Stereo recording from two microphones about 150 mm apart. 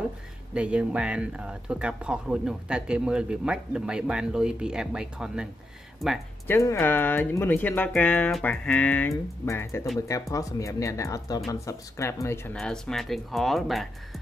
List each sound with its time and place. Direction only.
0.6 s speech: 5° right (ahead or behind)
6.4 s speech: 15° left (ahead or behind)
12.5 s speech: 5° left (ahead or behind)